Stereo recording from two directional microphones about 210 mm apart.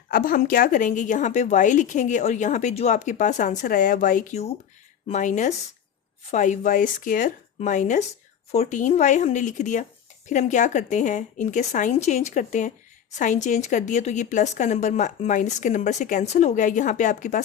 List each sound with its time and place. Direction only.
0.1 s speech: 40° left (ahead or behind)